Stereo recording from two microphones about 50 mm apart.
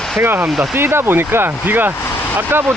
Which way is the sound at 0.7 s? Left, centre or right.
Right.